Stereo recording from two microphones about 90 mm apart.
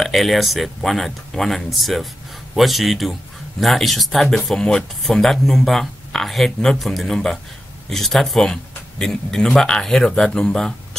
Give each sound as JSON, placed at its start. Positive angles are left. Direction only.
{"t": 0.0, "sound": "speech", "side_deg": 0}